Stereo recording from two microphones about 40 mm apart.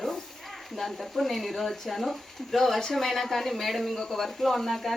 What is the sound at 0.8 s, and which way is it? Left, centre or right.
A woman's voice, centre.